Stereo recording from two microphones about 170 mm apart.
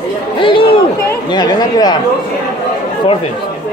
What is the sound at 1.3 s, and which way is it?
Speech, 25° left (ahead or behind).